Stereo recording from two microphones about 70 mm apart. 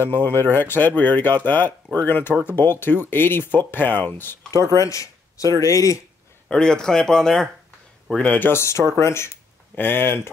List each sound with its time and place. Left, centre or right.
0.0 s speech: left
4.7 s speech: left
6.5 s speech: centre
8.2 s speech: left
8.5 s speech: left